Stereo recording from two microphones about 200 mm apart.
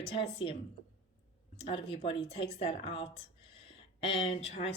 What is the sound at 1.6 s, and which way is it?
Speech, 25° left (ahead or behind).